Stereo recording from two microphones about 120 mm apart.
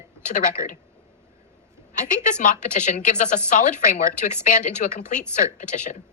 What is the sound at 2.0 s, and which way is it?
A woman's voice, 90° left.